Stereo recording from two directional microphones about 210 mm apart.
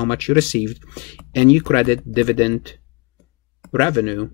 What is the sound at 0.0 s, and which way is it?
Speech, 45° left (ahead or behind).